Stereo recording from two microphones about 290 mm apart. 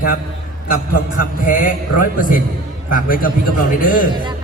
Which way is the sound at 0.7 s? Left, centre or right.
Left.